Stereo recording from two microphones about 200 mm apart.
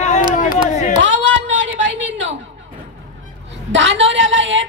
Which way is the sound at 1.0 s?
70° right (ahead or behind).